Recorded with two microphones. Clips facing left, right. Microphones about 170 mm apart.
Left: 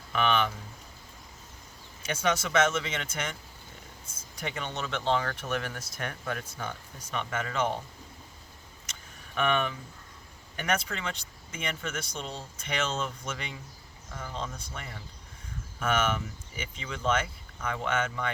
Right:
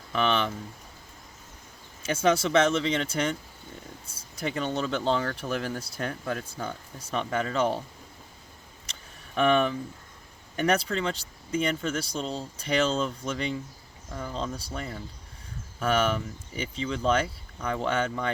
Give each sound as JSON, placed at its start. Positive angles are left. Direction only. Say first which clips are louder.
{"t": 0.1, "sound": "speech", "louder": "right 1 dB", "side_deg": -35}
{"t": 2.0, "sound": "speech", "louder": "right 5 dB", "side_deg": -30}
{"t": 8.9, "sound": "a sound", "louder": "right 4 dB", "side_deg": -35}
{"t": 10.6, "sound": "speech", "louder": "right 6 dB", "side_deg": -35}